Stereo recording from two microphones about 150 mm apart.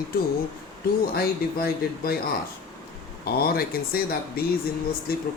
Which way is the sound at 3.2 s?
90° left.